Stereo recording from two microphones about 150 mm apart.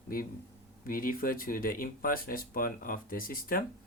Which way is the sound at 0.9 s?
75° left (ahead or behind).